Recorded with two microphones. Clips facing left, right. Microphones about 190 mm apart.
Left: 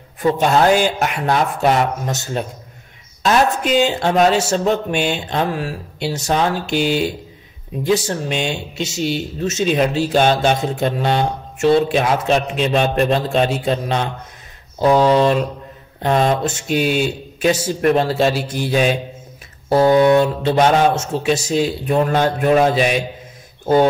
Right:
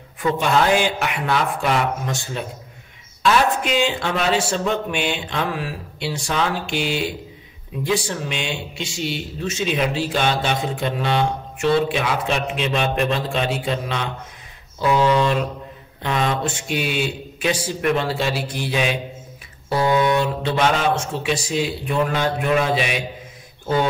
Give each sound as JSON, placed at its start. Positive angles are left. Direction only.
{"t": 0.2, "sound": "speech", "side_deg": 40}